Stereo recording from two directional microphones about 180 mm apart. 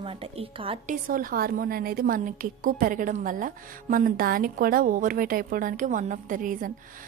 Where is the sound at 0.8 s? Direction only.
50° right (ahead or behind).